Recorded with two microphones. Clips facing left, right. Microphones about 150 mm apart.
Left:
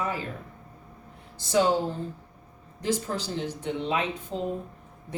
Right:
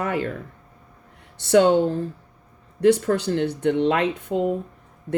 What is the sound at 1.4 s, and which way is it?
Speech, 70° right (ahead or behind).